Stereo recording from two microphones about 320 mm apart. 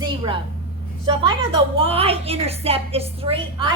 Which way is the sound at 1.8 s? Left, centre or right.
Centre.